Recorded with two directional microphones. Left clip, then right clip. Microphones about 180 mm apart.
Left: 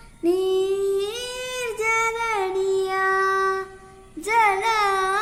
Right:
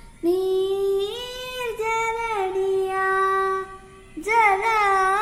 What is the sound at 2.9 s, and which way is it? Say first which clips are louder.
Child singing: even; centre (ahead or behind).